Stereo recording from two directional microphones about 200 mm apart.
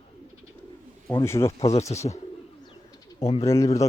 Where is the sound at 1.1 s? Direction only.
15° left (ahead or behind).